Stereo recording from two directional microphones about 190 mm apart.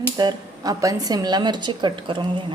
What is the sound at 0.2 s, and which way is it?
A woman's voice, 20° right (ahead or behind).